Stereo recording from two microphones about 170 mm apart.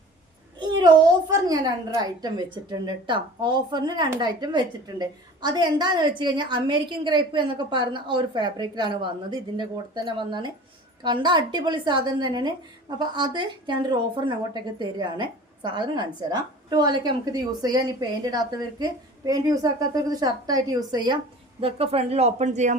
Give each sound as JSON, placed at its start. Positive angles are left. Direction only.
{"t": 0.6, "sound": "a sound", "side_deg": -25}
{"t": 2.7, "sound": "speech", "side_deg": -25}
{"t": 21.6, "sound": "speech", "side_deg": -35}